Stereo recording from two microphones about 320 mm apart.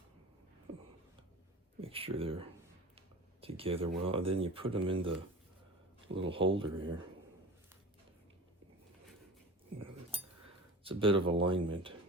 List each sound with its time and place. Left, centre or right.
1.8 s speech: centre
6.1 s speech: centre
9.7 s cutlery: centre
10.8 s speech: centre